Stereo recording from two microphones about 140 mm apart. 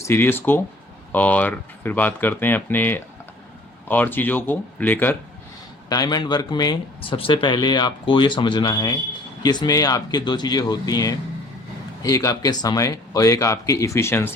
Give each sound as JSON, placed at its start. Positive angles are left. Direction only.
{"t": 0.0, "sound": "speech", "side_deg": 15}
{"t": 5.9, "sound": "speech", "side_deg": 30}